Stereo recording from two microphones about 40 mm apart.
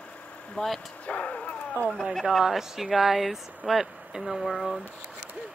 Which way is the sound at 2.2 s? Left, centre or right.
Centre.